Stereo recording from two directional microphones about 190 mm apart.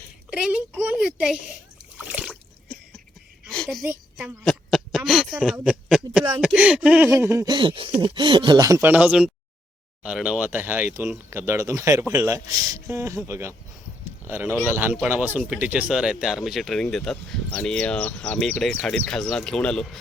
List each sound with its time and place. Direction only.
0.3 s a child's voice: 5° right (ahead or behind)
2.1 s water: centre (ahead or behind)
3.5 s a sound: 5° left (ahead or behind)
3.8 s speech: centre (ahead or behind)
14.0 s a sound: 15° right (ahead or behind)
14.7 s speech: 10° right (ahead or behind)